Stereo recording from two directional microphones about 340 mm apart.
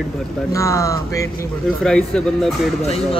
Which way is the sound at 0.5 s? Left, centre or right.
Centre.